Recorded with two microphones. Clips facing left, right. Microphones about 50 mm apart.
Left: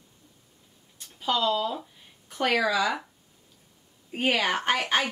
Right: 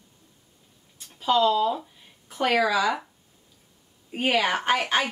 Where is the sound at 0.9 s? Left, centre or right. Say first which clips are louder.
Right 5 dB; centre.